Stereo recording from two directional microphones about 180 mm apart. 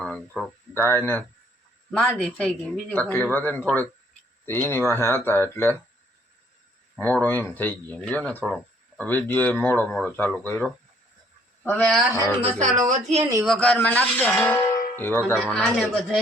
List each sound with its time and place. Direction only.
0.0 s speech: 5° left (ahead or behind)
6.9 s speech: 10° left (ahead or behind)
9.0 s speech: 10° left (ahead or behind)
12.4 s a woman's voice: 40° right (ahead or behind)
13.4 s speech: 5° left (ahead or behind)